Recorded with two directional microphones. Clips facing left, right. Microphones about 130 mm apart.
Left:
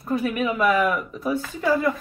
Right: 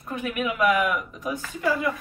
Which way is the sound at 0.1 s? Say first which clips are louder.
Left 5 dB; 35° left (ahead or behind).